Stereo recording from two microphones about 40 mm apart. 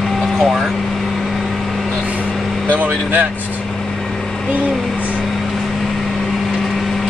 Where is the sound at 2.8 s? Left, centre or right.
Right.